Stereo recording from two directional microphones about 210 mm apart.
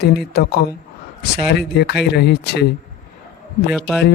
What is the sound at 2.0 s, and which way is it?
Speech, 50° left (ahead or behind).